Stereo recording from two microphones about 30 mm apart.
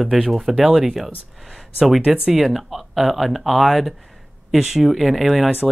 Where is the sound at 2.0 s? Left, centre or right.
Right.